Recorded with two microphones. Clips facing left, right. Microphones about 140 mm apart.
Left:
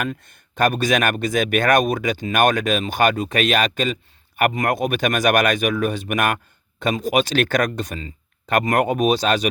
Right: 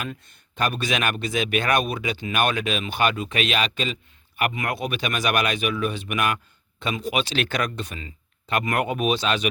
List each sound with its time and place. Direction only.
0.0 s speech: 50° left (ahead or behind)